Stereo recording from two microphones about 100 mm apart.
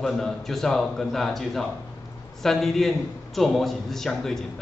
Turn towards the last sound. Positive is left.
turn(degrees=5)  # may be behind; listen again after turning